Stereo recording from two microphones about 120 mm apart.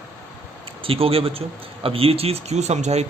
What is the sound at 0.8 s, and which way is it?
A man's voice, 50° right (ahead or behind).